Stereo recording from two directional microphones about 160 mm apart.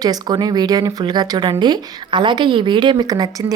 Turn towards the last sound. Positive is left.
turn(degrees=-25)  # may be behind; listen again after turning